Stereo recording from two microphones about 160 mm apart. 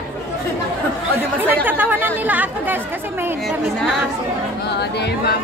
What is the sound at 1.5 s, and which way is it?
Chatter, 10° right (ahead or behind).